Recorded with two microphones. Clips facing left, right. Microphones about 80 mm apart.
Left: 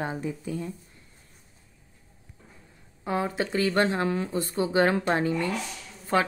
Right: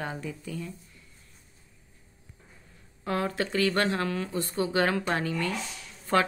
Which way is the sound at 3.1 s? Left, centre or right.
Centre.